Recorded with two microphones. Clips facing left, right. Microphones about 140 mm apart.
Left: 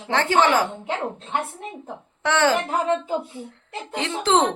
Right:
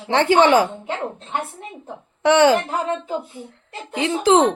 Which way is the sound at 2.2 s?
15° right (ahead or behind).